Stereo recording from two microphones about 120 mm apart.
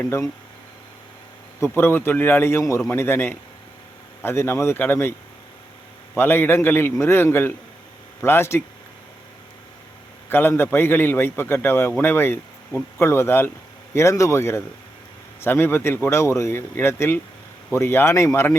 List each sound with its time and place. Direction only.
0.0 s a man's voice: 20° left (ahead or behind)
1.5 s a man's voice: 20° left (ahead or behind)
6.1 s a man's voice: 15° left (ahead or behind)
10.2 s a man's voice: 20° left (ahead or behind)